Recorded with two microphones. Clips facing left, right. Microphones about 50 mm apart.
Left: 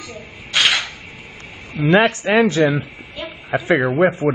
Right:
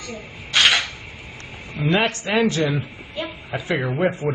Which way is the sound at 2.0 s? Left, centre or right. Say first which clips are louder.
Left 6 dB; left.